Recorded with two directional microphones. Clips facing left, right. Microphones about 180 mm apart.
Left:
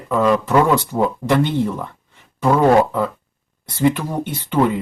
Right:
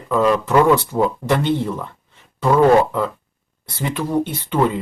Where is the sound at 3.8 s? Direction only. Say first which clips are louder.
Left 2 dB; 15° left (ahead or behind).